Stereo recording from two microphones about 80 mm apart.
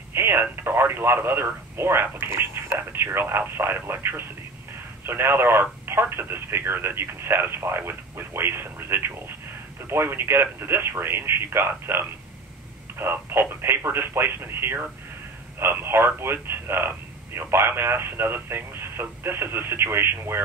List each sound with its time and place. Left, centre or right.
0.1 s speech: right